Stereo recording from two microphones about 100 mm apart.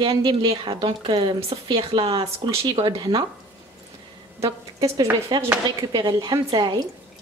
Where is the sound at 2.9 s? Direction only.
40° right (ahead or behind).